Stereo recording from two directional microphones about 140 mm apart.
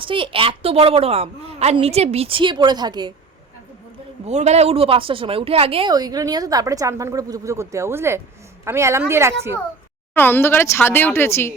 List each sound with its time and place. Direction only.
0.0 s a woman's voice: 40° right (ahead or behind)
4.3 s speech: 55° right (ahead or behind)
5.9 s speech: 25° right (ahead or behind)
10.2 s speech: 15° left (ahead or behind)